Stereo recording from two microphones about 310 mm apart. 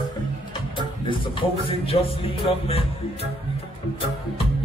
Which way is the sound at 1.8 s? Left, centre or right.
Centre.